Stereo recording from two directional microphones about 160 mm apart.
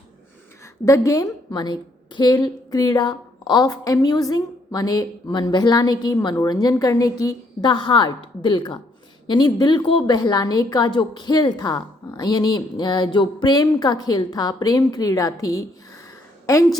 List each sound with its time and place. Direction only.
0.9 s a woman's voice: 20° left (ahead or behind)